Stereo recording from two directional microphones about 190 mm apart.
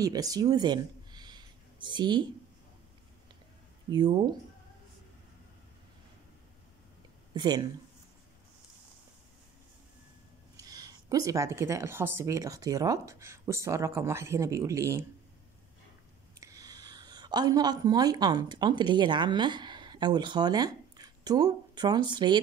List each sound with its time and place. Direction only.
0.0 s a sound: 20° right (ahead or behind)
7.3 s speech: 20° right (ahead or behind)
10.5 s speech: 20° right (ahead or behind)
16.3 s speech: 20° right (ahead or behind)